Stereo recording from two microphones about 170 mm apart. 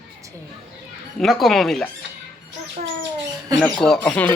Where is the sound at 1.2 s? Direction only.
Centre (ahead or behind).